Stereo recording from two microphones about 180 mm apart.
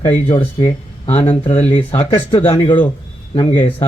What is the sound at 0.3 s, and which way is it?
Speech, 30° left (ahead or behind).